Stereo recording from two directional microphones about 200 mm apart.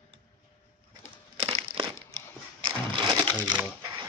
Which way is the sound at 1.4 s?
30° right (ahead or behind).